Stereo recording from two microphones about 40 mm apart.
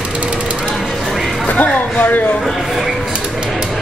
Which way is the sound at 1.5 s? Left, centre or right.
Left.